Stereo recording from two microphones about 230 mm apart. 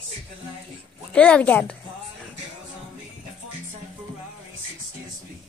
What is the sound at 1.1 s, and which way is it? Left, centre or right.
Speech, centre.